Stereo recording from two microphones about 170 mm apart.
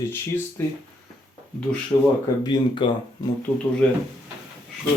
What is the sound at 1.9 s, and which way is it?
Speech, 15° left (ahead or behind).